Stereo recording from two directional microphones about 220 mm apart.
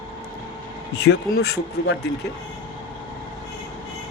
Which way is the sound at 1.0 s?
50° left (ahead or behind).